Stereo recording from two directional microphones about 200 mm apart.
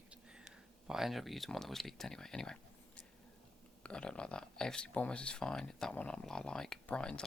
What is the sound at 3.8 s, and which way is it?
Speech, 5° left (ahead or behind).